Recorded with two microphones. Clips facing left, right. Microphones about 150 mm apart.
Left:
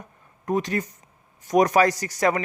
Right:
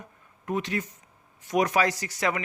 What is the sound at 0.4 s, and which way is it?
Speech, 40° left (ahead or behind).